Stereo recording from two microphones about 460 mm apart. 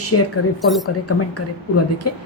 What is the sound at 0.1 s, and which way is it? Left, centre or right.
A woman's voice, left.